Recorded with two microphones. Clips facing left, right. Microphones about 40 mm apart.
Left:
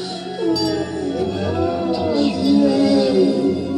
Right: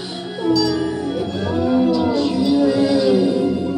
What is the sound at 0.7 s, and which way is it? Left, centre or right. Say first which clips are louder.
Music: even; centre.